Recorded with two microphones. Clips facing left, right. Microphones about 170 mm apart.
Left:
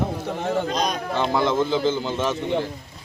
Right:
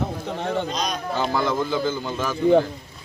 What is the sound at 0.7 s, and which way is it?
Speech, 50° left (ahead or behind).